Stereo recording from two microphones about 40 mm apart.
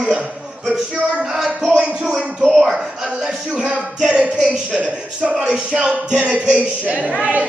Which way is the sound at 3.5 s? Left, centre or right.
Right.